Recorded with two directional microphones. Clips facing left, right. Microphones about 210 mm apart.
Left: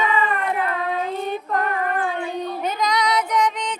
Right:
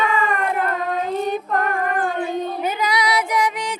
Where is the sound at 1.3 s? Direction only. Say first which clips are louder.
Right 2 dB; 45° right (ahead or behind).